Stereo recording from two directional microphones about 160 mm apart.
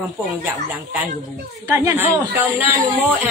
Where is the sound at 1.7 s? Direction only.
15° right (ahead or behind).